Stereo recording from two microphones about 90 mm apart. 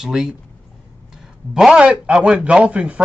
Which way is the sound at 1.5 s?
5° right (ahead or behind).